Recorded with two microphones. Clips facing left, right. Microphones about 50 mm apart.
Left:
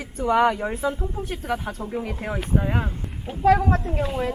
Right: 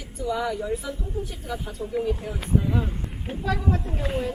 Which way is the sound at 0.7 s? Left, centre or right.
Left.